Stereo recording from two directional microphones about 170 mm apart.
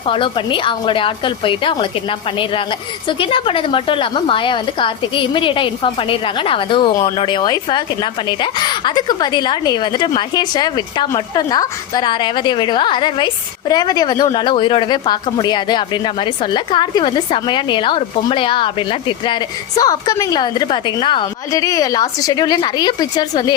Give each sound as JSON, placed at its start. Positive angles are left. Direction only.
{"t": 0.0, "sound": "a woman's voice", "side_deg": 30}